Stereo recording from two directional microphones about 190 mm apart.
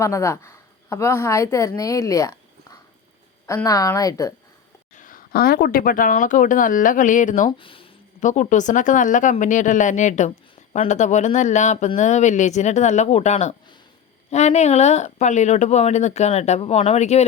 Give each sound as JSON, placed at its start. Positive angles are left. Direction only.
{"t": 0.0, "sound": "a woman's voice", "side_deg": 15}
{"t": 3.4, "sound": "a woman's voice", "side_deg": 15}
{"t": 4.9, "sound": "speech", "side_deg": 45}
{"t": 7.6, "sound": "speech", "side_deg": 30}
{"t": 8.2, "sound": "speech", "side_deg": 40}